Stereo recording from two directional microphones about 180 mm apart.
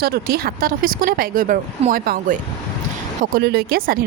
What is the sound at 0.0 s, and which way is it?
Speech, 60° right (ahead or behind).